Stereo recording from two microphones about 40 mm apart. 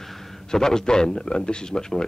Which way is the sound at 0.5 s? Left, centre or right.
Centre.